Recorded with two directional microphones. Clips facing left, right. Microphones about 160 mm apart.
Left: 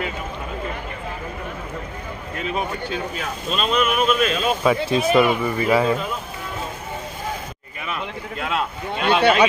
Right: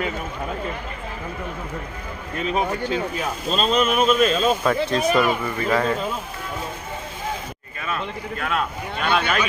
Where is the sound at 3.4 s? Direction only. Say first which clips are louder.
Right 1 dB; 35° right (ahead or behind).